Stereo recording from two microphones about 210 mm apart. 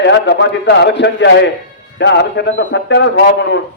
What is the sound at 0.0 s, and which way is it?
A man's voice, 60° left (ahead or behind).